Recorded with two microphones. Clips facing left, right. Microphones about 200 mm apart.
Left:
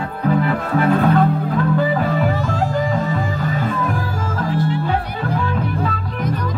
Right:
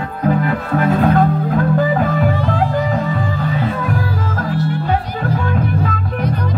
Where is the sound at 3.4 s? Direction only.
45° left (ahead or behind).